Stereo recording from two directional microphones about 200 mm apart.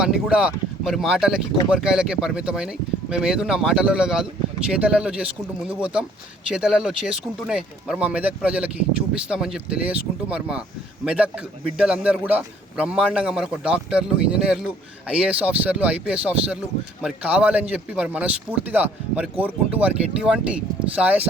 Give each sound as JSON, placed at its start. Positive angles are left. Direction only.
{"t": 0.0, "sound": "a man's voice", "side_deg": -5}